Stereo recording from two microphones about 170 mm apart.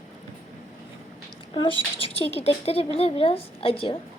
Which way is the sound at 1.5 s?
30° left (ahead or behind).